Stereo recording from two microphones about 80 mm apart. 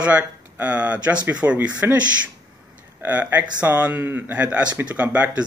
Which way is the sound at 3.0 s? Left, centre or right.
Right.